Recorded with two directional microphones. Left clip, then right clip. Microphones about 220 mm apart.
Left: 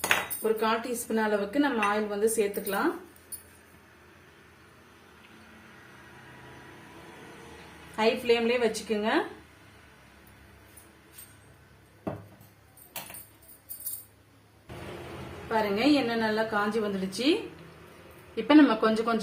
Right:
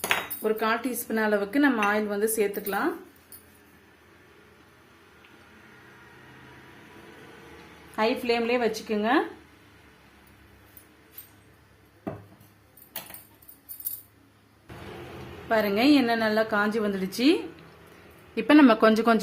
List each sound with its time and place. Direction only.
0.4 s speech: 45° right (ahead or behind)
7.9 s speech: 35° right (ahead or behind)
15.4 s speech: 50° right (ahead or behind)
18.4 s speech: 50° right (ahead or behind)